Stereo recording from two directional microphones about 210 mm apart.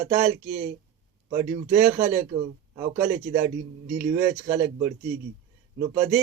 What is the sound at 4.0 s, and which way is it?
Mantra, 5° right (ahead or behind).